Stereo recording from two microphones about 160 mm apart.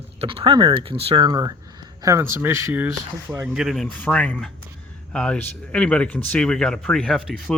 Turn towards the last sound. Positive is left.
turn(degrees=0)  # may be behind; listen again after turning